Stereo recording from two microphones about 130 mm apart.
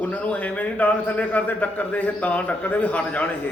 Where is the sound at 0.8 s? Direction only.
10° left (ahead or behind).